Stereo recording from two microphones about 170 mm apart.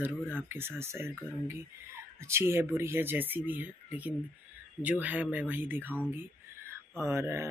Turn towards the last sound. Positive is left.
turn(degrees=-15)  # may be behind; listen again after turning